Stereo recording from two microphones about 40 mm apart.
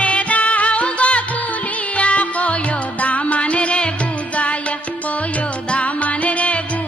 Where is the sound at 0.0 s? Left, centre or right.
Left.